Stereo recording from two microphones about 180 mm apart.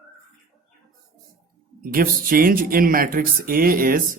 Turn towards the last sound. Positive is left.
turn(degrees=-50)  # may be behind; listen again after turning